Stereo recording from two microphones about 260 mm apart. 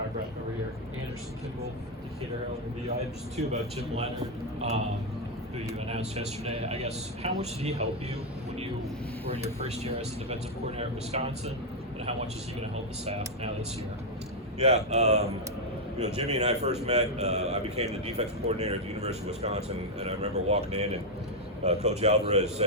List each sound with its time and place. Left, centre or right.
2.9 s a man's voice: right
9.3 s a man's voice: right
14.6 s a man's voice: right